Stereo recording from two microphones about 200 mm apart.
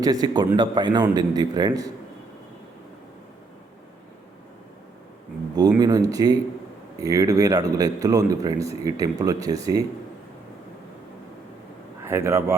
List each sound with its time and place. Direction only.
0.0 s a man's voice: 20° right (ahead or behind)
5.5 s a man's voice: 20° right (ahead or behind)
12.0 s a man's voice: 15° right (ahead or behind)